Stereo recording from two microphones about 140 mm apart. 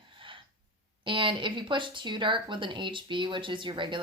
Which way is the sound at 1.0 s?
35° right (ahead or behind).